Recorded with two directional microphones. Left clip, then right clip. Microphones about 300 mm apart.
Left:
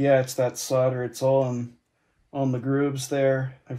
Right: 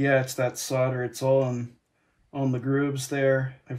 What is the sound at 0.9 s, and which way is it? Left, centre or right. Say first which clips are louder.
Speech: left 1 dB; centre.